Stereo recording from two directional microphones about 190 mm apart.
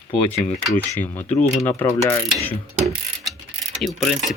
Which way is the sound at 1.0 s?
10° left (ahead or behind).